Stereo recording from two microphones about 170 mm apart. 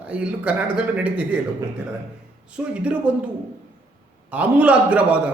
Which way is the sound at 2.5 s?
5° right (ahead or behind).